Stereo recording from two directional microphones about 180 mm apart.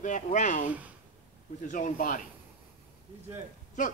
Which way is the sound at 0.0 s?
45° left (ahead or behind).